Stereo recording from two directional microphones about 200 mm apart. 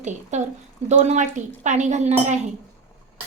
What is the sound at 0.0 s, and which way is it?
A woman's voice, 35° right (ahead or behind).